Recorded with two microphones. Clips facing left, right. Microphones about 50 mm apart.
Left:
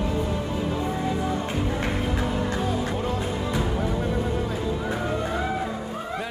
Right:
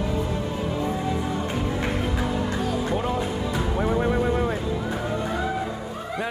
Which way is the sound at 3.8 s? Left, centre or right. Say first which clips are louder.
Right 4 dB; right.